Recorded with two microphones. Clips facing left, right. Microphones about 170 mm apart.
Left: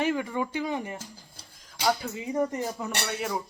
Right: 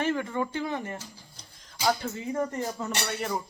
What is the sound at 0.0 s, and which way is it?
Speech, 15° left (ahead or behind).